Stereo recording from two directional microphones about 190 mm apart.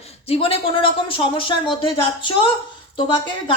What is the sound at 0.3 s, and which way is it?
A woman's voice, 30° left (ahead or behind).